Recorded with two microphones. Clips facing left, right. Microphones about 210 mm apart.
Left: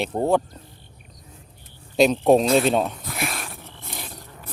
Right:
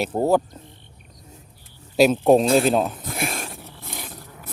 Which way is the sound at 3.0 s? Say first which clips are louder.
Right 2 dB; 30° right (ahead or behind).